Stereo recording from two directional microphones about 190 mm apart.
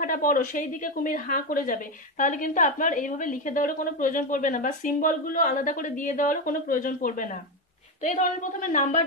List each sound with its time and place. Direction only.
0.0 s a woman's voice: 45° left (ahead or behind)